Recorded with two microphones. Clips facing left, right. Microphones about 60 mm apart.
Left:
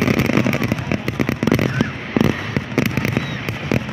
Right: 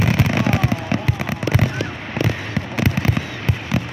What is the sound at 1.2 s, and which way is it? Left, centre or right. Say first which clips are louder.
Fireworks: left 4 dB; left.